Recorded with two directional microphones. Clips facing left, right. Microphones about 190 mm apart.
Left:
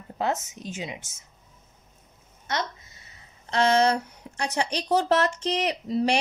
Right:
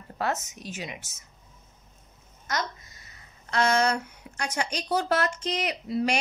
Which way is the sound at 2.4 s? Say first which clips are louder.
Left 1 dB; 30° left (ahead or behind).